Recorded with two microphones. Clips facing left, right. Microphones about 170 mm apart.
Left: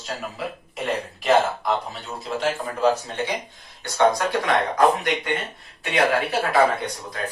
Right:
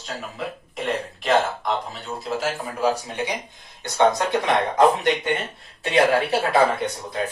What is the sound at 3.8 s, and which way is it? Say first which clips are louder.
Speech: even; 20° right (ahead or behind).